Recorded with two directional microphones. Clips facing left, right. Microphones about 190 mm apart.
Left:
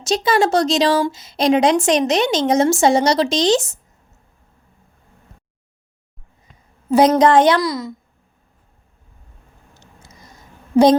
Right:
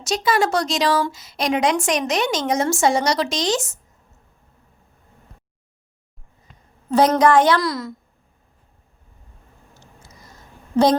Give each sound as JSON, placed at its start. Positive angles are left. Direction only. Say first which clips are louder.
{"t": 0.0, "sound": "a woman's voice", "louder": "left 3 dB", "side_deg": 25}
{"t": 6.9, "sound": "a woman's voice", "louder": "left 3 dB", "side_deg": 15}
{"t": 7.6, "sound": "a woman's voice", "louder": "left 2 dB", "side_deg": 0}